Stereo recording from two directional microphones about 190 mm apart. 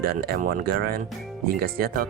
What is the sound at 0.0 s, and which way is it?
Speech, 55° right (ahead or behind).